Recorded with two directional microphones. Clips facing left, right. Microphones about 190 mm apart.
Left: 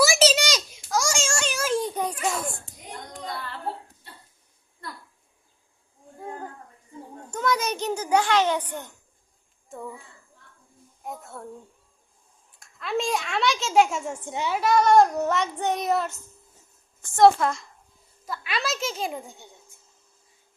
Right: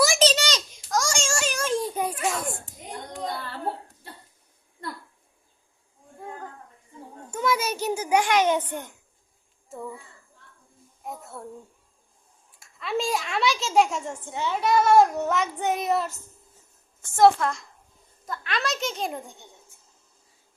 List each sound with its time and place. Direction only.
0.0 s a sound: 5° left (ahead or behind)
7.3 s a child's voice: 10° right (ahead or behind)
9.6 s a child's voice: centre (ahead or behind)
11.0 s speech: centre (ahead or behind)
12.5 s a child's voice: centre (ahead or behind)
14.3 s a child's voice: 15° left (ahead or behind)
14.6 s a child's voice: centre (ahead or behind)
17.2 s a child's voice: centre (ahead or behind)